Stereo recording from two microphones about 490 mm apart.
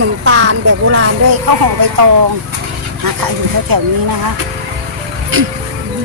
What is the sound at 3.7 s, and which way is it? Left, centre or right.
Speech, right.